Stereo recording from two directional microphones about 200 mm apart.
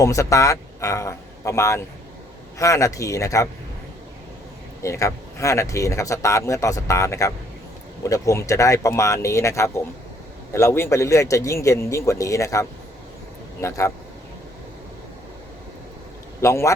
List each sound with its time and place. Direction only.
0.0 s a man's voice: 15° left (ahead or behind)
4.8 s speech: 15° left (ahead or behind)
16.4 s speech: 15° left (ahead or behind)